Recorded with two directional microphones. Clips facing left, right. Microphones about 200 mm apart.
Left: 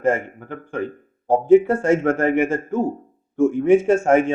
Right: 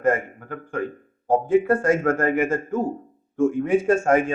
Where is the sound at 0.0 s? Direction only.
25° left (ahead or behind).